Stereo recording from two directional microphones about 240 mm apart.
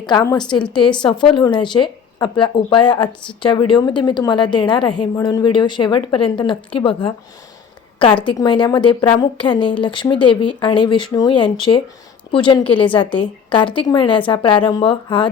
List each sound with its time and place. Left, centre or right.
0.0 s a woman's voice: centre
8.2 s a woman's voice: centre